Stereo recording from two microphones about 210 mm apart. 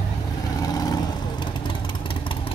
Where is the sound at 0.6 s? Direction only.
20° left (ahead or behind).